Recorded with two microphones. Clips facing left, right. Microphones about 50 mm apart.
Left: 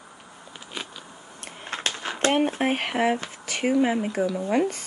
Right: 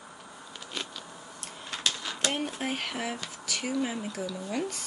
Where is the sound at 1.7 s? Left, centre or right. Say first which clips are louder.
Left 3 dB; left.